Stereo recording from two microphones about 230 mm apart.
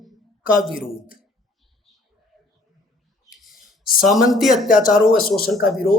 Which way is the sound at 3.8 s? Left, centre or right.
Left.